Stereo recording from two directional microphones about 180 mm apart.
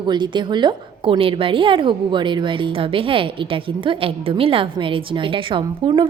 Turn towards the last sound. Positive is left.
turn(degrees=-30)  # may be behind; listen again after turning